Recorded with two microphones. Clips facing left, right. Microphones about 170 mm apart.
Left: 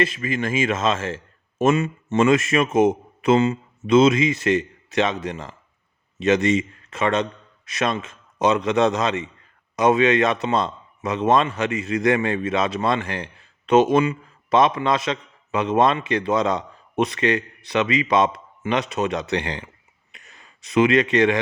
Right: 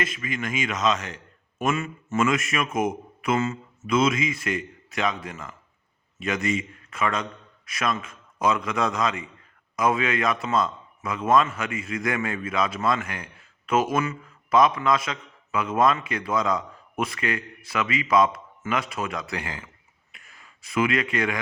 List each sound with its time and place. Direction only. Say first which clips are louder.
0.0 s a man's voice: left 7 dB; 30° left (ahead or behind)